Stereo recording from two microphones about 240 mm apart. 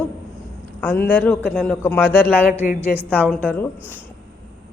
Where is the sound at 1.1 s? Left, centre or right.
Centre.